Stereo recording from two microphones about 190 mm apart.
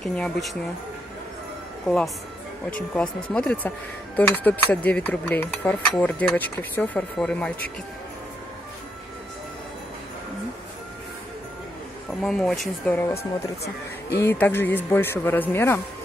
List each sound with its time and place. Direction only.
0.0 s speech: 5° left (ahead or behind)
2.7 s speech: 5° left (ahead or behind)
12.2 s speech: centre (ahead or behind)
14.2 s speech: 10° left (ahead or behind)